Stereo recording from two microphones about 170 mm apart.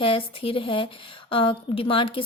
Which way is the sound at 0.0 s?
30° left (ahead or behind).